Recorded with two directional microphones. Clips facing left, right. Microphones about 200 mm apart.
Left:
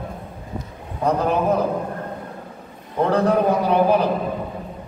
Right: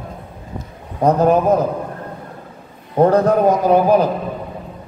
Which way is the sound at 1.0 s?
40° right (ahead or behind).